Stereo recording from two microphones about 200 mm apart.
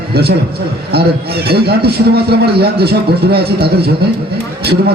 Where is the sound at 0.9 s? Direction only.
50° right (ahead or behind).